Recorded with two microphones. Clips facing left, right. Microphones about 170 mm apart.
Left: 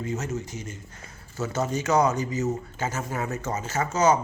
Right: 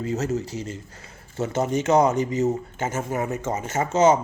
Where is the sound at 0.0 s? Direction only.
35° right (ahead or behind).